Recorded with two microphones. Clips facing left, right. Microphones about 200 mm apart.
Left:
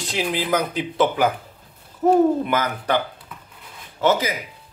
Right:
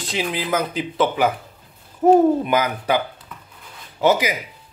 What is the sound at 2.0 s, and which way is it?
Speech, 15° right (ahead or behind).